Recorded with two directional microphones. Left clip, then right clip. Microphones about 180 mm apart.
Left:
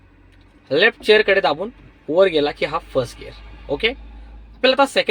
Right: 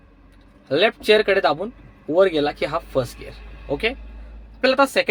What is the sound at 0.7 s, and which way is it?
Speech, 15° left (ahead or behind).